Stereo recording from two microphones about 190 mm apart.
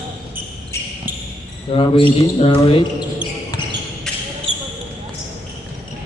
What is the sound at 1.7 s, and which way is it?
Speech, 30° left (ahead or behind).